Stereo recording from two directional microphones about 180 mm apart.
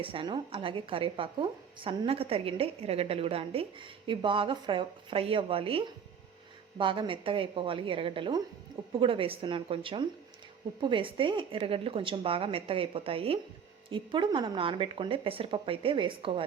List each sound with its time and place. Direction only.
0.0 s a woman's voice: 30° right (ahead or behind)